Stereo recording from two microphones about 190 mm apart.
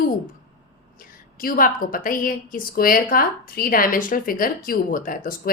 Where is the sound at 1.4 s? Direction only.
50° left (ahead or behind).